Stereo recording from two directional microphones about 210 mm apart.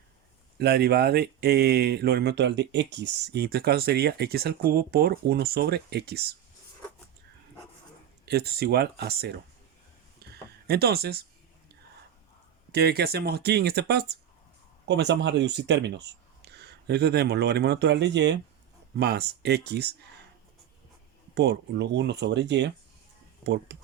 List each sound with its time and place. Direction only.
0.6 s speech: 50° right (ahead or behind)
8.2 s speech: 50° right (ahead or behind)
10.2 s a sound: 50° right (ahead or behind)
12.7 s speech: 50° right (ahead or behind)
21.3 s speech: 50° right (ahead or behind)